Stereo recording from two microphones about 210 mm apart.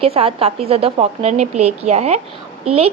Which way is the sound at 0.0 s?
30° right (ahead or behind).